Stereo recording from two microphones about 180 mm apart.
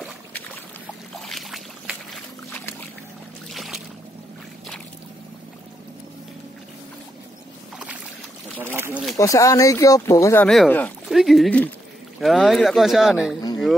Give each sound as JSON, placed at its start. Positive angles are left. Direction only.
{"t": 1.1, "sound": "boat", "side_deg": 0}
{"t": 8.7, "sound": "speech", "side_deg": -15}
{"t": 9.1, "sound": "speech", "side_deg": 20}